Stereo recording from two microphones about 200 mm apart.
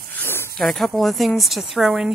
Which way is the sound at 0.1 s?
10° left (ahead or behind).